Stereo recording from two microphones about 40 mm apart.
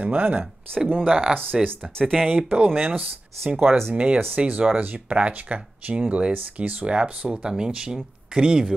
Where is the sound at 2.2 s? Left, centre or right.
Right.